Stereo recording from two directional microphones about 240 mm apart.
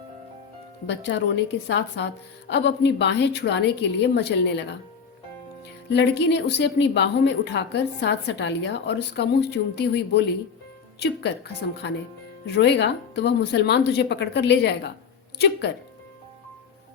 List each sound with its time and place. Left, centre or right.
0.9 s a woman's voice: left
5.9 s a woman's voice: left